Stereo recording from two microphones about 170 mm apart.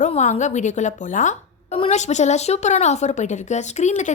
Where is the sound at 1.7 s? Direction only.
35° left (ahead or behind).